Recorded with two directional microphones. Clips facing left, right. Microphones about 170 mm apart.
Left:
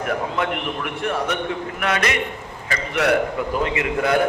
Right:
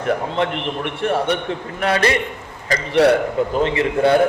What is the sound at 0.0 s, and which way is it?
A man's voice, 30° right (ahead or behind).